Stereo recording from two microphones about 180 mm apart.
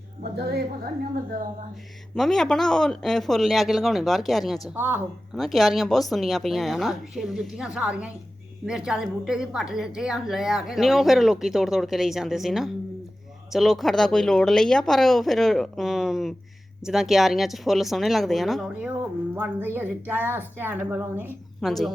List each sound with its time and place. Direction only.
0.2 s a woman's voice: 60° right (ahead or behind)
2.1 s a woman's voice: centre (ahead or behind)
4.7 s speech: 10° right (ahead or behind)
5.4 s a woman's voice: centre (ahead or behind)
19.4 s speech: 10° right (ahead or behind)
21.6 s a woman's voice: centre (ahead or behind)